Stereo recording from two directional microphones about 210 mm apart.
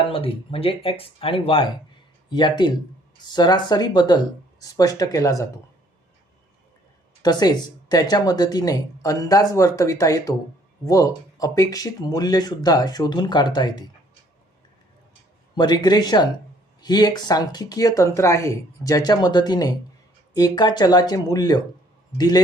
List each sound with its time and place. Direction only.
0.1 s speech: 25° left (ahead or behind)
7.2 s speech: 20° left (ahead or behind)
15.5 s speech: 20° left (ahead or behind)